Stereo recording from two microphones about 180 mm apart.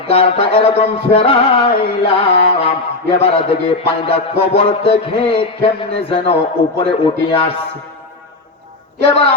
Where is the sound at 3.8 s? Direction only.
30° left (ahead or behind).